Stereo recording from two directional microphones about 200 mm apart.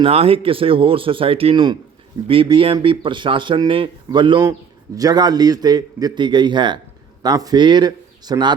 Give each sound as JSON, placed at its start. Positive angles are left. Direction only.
{"t": 0.0, "sound": "speech", "side_deg": -30}